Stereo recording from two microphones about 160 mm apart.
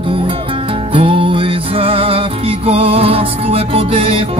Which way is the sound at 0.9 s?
35° right (ahead or behind).